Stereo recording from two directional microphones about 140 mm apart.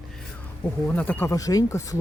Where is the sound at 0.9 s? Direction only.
10° left (ahead or behind).